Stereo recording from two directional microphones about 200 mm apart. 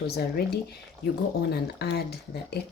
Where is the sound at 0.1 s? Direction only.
50° left (ahead or behind).